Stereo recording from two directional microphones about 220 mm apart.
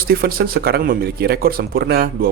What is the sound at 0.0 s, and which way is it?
A man's voice, 45° right (ahead or behind).